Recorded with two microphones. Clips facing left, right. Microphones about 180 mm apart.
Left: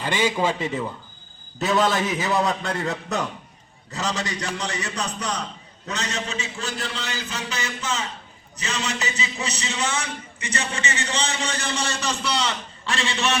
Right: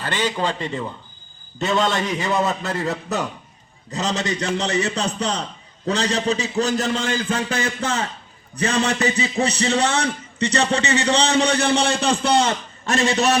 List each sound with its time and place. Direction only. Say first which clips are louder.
0.0 s a man's voice: left 1 dB; 10° left (ahead or behind)
3.9 s a man's voice: right 4 dB; 20° right (ahead or behind); by 13.4 s 40° right (ahead or behind)